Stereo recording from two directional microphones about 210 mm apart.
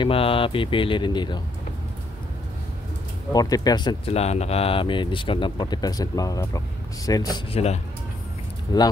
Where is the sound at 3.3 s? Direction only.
20° left (ahead or behind).